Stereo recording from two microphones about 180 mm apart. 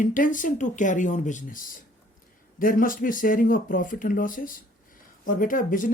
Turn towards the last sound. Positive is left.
turn(degrees=50)  # may be behind; listen again after turning